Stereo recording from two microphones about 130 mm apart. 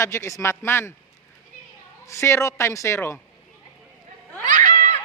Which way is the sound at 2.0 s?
20° left (ahead or behind).